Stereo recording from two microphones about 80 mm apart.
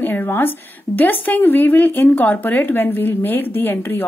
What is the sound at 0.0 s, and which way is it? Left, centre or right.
A woman's voice, left.